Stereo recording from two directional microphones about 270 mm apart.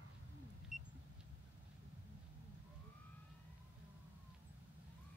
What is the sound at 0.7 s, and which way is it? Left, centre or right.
Vehicle, right.